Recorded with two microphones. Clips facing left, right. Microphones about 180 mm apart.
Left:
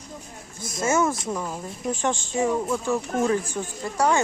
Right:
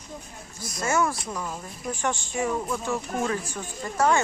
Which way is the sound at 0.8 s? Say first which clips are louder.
Left 3 dB; 20° left (ahead or behind).